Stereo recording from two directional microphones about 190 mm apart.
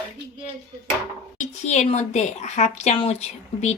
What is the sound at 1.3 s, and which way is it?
A woman's voice, 35° left (ahead or behind).